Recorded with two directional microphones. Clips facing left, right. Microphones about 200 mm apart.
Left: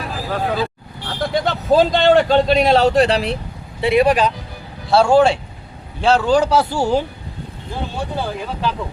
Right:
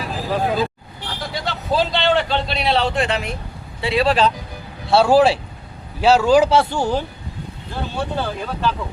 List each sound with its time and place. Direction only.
0.0 s vehicle: centre (ahead or behind)
1.2 s a man's voice: 50° left (ahead or behind)
3.8 s speech: 20° left (ahead or behind)
4.9 s speech: centre (ahead or behind)
8.1 s speech: 10° left (ahead or behind)